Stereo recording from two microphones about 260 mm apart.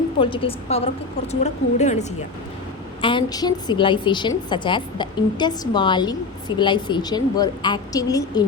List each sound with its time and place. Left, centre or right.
0.2 s a woman's voice: centre